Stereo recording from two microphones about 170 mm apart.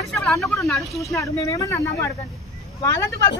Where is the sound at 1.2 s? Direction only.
20° left (ahead or behind).